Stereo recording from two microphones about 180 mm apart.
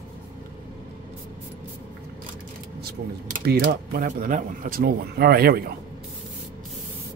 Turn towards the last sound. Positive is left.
turn(degrees=-55)  # may be behind; listen again after turning